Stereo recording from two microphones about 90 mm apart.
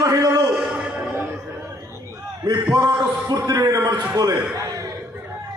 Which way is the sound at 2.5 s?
50° right (ahead or behind).